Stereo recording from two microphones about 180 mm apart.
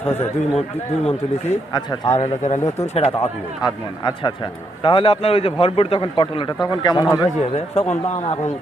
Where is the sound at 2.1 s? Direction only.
40° left (ahead or behind); by 7.2 s 20° left (ahead or behind).